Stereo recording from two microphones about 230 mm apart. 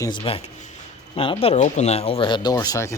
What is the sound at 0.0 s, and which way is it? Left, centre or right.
Speech, left.